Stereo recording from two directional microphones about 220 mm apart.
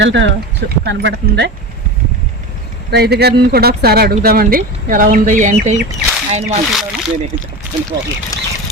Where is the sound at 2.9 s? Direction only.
50° right (ahead or behind).